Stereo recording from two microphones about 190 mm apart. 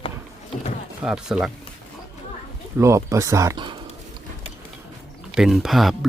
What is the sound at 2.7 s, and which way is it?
Speech, 15° right (ahead or behind).